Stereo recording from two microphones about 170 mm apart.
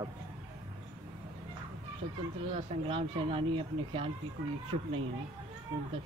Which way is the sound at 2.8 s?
35° right (ahead or behind).